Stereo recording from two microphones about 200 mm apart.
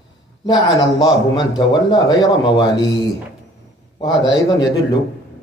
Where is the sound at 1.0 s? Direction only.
20° left (ahead or behind).